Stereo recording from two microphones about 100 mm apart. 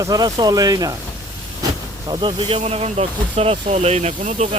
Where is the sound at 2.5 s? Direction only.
90° right.